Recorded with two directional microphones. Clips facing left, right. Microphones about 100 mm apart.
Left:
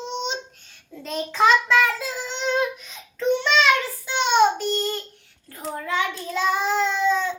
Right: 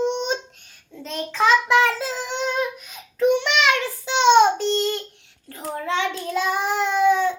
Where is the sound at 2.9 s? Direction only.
10° right (ahead or behind).